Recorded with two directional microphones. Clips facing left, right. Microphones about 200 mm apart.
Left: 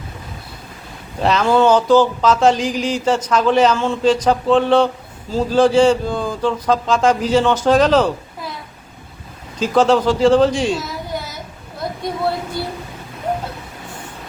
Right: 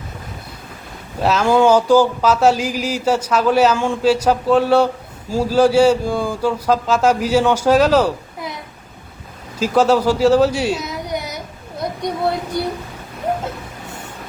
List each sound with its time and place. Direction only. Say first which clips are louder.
1.2 s speech: even; 5° right (ahead or behind)
9.6 s speech: even; 10° right (ahead or behind)
10.8 s carnatic music: right 1 dB; 20° right (ahead or behind)
11.8 s a sound: right 1 dB; 20° right (ahead or behind)